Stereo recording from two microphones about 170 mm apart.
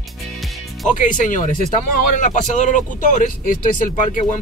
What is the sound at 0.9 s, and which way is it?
Speech, 50° left (ahead or behind).